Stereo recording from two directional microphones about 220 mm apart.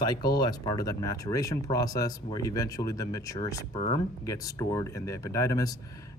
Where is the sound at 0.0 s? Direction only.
20° left (ahead or behind).